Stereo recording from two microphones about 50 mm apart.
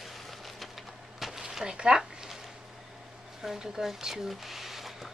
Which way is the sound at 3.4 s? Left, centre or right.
Centre.